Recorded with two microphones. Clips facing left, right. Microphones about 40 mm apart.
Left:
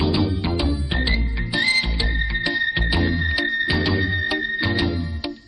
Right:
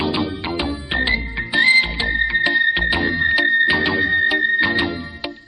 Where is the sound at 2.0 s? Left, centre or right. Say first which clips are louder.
Right 7 dB; centre.